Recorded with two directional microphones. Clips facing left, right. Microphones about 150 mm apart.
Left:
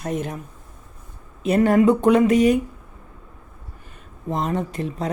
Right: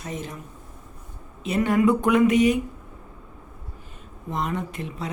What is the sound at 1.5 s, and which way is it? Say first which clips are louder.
Speech: left 5 dB; 45° left (ahead or behind).